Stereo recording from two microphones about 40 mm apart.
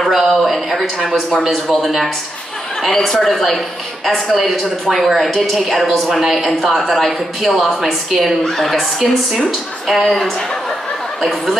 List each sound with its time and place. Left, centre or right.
0.1 s a woman's voice: centre